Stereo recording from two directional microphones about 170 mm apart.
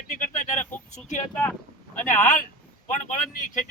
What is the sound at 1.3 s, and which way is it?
Speech, 10° left (ahead or behind).